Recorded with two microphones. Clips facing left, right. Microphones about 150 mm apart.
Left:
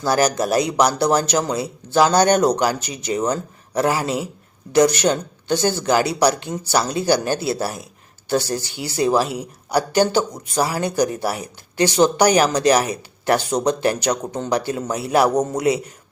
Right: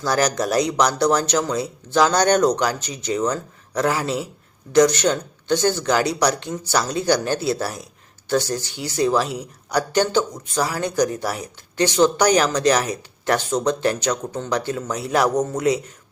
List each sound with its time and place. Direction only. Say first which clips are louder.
0.1 s a man's voice: left 2 dB; 5° left (ahead or behind)